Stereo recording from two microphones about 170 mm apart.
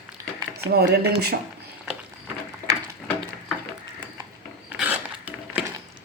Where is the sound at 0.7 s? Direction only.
70° right (ahead or behind).